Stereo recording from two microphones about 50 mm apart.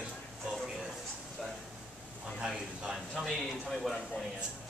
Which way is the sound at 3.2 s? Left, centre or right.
Centre.